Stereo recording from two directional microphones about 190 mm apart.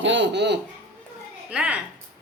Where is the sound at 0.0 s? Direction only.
70° right (ahead or behind).